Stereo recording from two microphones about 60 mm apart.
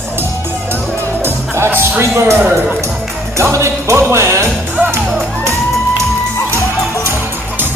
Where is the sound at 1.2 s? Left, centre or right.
Right.